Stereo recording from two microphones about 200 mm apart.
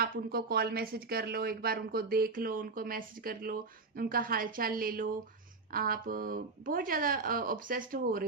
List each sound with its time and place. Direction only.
0.0 s speech: 50° right (ahead or behind)